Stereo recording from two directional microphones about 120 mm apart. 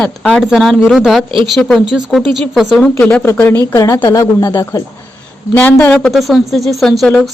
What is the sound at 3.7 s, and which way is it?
Speech, 25° left (ahead or behind).